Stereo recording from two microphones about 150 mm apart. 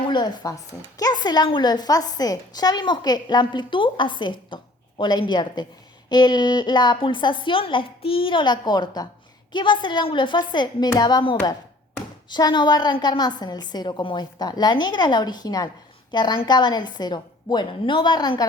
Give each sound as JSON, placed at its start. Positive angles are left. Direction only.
{"t": 0.0, "sound": "a woman's voice", "side_deg": 30}